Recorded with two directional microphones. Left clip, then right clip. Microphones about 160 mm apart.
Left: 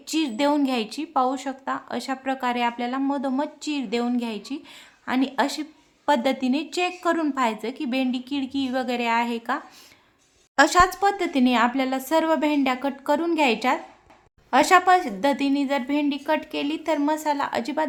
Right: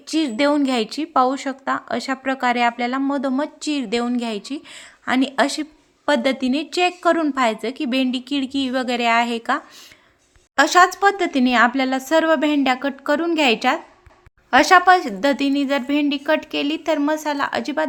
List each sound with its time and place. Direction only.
0.1 s speech: 20° right (ahead or behind)
10.7 s speech: 20° right (ahead or behind)